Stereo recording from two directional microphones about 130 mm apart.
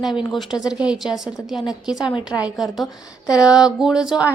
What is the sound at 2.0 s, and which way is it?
Speech, 35° left (ahead or behind).